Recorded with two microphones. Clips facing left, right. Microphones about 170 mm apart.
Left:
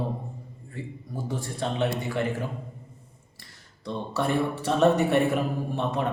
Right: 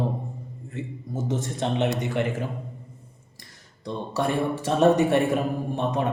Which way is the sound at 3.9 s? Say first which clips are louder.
Right 1 dB; 15° right (ahead or behind).